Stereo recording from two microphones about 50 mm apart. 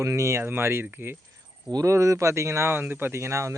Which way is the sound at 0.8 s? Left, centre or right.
Right.